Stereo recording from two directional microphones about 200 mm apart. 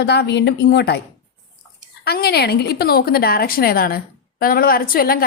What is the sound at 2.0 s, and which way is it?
A woman's voice, 50° left (ahead or behind).